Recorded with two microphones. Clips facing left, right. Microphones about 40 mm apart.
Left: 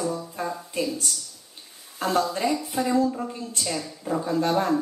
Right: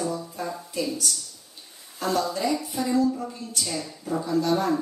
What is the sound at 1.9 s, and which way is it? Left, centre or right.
A woman's voice, left.